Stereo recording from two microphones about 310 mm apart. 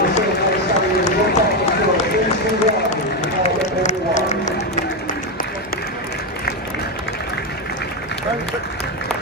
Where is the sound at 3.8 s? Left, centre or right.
Left.